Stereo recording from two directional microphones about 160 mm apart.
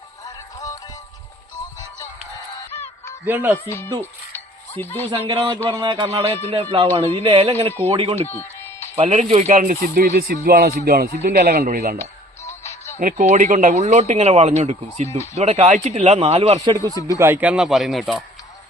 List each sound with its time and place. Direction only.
0.3 s music: 20° left (ahead or behind)
2.7 s honk: 15° left (ahead or behind)
3.2 s speech: 10° right (ahead or behind)
3.7 s speech: 15° left (ahead or behind)
4.0 s music: 10° left (ahead or behind)
5.1 s speech: 35° right (ahead or behind)
8.1 s music: 15° left (ahead or behind)
9.0 s speech: 45° right (ahead or behind); by 11.9 s 65° right (ahead or behind)
12.5 s music: 15° left (ahead or behind)
13.0 s speech: 55° right (ahead or behind); by 16.6 s 40° right (ahead or behind)
16.6 s speech: 20° right (ahead or behind)
16.9 s speech: 20° left (ahead or behind)
17.2 s speech: 15° right (ahead or behind)